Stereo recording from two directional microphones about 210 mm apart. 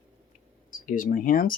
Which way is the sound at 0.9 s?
40° left (ahead or behind).